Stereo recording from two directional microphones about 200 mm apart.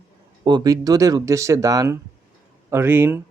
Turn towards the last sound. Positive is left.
turn(degrees=-10)  # may be behind; listen again after turning